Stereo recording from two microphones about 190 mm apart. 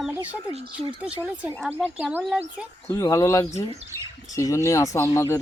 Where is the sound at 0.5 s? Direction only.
30° right (ahead or behind).